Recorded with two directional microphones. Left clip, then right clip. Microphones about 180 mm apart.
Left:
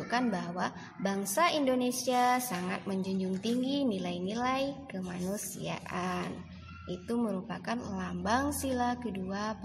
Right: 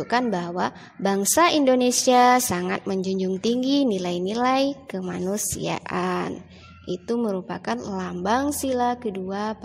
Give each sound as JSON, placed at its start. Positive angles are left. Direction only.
{"t": 0.1, "sound": "a woman's voice", "side_deg": -40}